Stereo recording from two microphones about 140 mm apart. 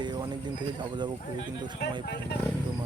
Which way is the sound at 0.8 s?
30° right (ahead or behind).